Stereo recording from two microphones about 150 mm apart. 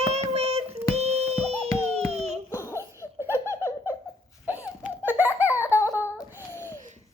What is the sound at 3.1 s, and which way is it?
Laughter, 15° right (ahead or behind).